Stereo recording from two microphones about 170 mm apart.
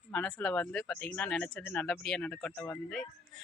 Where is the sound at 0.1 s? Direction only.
5° left (ahead or behind).